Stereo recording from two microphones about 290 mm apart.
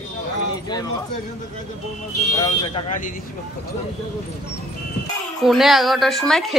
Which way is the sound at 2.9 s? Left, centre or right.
Left.